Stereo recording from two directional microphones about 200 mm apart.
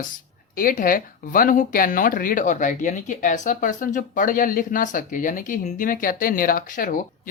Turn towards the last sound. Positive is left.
turn(degrees=45)  # may be behind; listen again after turning